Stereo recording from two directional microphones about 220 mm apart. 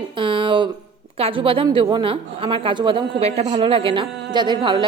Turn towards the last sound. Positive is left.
turn(degrees=-20)  # may be behind; listen again after turning